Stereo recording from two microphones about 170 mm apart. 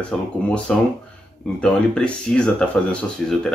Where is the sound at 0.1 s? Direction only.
5° left (ahead or behind).